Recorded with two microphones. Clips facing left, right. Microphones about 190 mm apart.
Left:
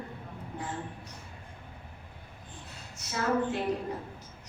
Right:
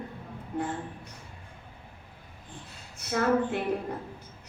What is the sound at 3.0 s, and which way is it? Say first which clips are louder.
Speech: right 4 dB; 55° right (ahead or behind).